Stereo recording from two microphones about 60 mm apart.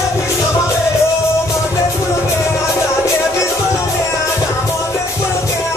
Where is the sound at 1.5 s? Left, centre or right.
Left.